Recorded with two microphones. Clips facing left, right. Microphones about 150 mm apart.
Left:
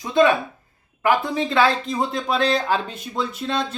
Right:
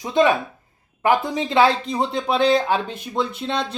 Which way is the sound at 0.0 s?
20° right (ahead or behind).